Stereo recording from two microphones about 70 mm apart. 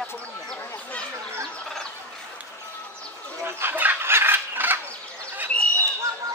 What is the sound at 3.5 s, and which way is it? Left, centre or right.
Chicken, right.